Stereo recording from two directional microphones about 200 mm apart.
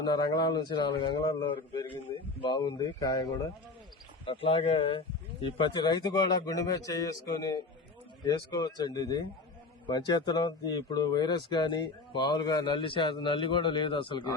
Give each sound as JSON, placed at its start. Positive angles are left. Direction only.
{"t": 0.0, "sound": "speech", "side_deg": 20}
{"t": 4.3, "sound": "speech", "side_deg": 30}